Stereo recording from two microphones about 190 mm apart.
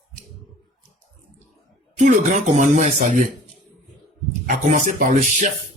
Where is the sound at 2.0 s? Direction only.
40° right (ahead or behind).